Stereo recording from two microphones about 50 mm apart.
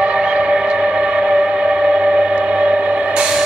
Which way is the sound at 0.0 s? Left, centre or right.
Centre.